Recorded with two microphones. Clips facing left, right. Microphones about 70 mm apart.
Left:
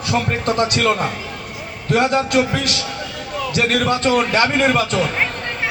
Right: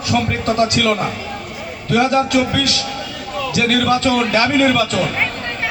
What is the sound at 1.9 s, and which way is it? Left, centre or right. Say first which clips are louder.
Speech: right 2 dB; left.